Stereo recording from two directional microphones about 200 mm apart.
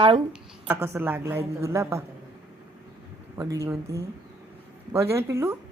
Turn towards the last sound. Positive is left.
turn(degrees=-10)  # may be behind; listen again after turning